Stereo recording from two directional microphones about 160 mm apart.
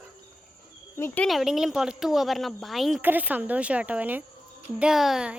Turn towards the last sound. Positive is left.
turn(degrees=-5)  # may be behind; listen again after turning